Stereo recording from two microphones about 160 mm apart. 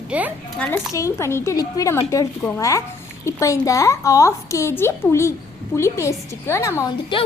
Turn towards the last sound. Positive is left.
turn(degrees=30)  # may be behind; listen again after turning